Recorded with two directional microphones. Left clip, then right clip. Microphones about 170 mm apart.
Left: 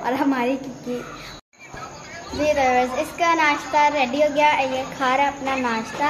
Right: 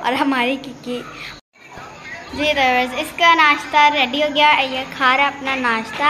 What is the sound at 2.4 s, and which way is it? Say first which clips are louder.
A woman's voice: right 2 dB; 5° left (ahead or behind).